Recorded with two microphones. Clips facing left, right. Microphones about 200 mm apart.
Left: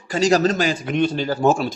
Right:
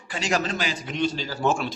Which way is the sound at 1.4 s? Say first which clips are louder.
Left 6 dB; 40° left (ahead or behind).